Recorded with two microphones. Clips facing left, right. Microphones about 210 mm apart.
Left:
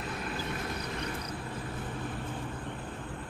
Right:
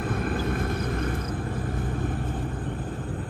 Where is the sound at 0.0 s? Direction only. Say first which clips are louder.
Right 9 dB; 50° right (ahead or behind).